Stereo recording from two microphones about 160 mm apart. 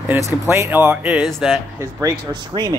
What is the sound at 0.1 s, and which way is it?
Speech, 15° right (ahead or behind).